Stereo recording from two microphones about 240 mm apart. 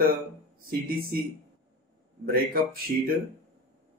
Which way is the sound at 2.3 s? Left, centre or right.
Right.